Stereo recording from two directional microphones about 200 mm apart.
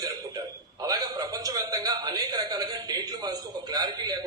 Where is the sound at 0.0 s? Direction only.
20° right (ahead or behind).